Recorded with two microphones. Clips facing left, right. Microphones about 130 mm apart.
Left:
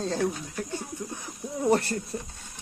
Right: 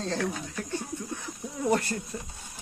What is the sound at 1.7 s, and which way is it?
Speech, 35° left (ahead or behind).